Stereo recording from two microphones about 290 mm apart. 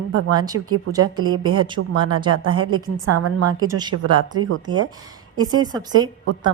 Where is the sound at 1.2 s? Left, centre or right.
Right.